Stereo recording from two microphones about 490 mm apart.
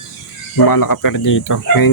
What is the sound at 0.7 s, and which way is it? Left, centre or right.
Speech, left.